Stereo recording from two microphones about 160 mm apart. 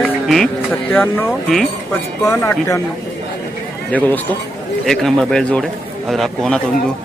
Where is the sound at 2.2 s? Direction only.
15° left (ahead or behind).